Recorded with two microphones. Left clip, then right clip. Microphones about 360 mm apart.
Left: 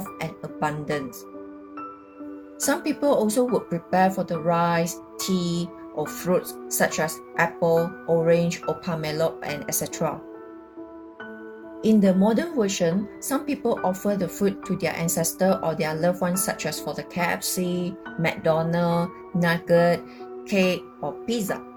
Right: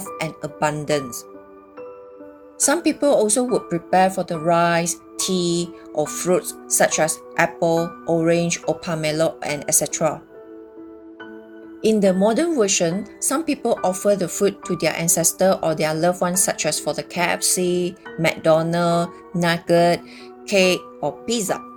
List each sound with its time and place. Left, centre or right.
0.2 s speech: right
2.6 s a woman's voice: right
11.8 s a woman's voice: right